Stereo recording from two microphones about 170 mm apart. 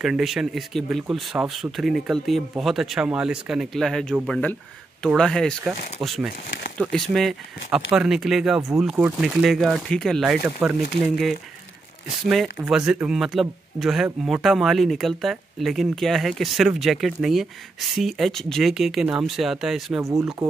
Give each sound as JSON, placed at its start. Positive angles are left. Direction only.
{"t": 0.0, "sound": "speech", "side_deg": 0}
{"t": 20.0, "sound": "speech", "side_deg": -15}